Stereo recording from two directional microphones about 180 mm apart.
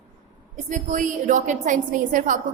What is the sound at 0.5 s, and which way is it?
A woman's voice, 45° right (ahead or behind).